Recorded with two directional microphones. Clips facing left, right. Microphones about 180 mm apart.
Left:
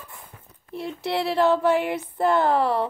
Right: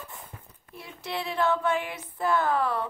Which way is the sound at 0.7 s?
65° left (ahead or behind).